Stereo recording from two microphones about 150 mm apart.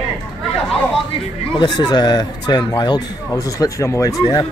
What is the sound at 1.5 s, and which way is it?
Speech, 30° left (ahead or behind).